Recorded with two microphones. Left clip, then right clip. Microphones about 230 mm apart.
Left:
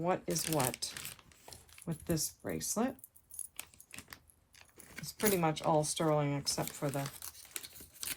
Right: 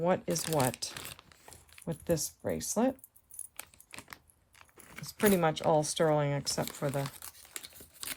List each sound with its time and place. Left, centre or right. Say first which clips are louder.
0.0 s speech: right 4 dB; right
3.6 s typing: right 3 dB; right
4.5 s a sound: right 2 dB; right
5.1 s speech: right 5 dB; right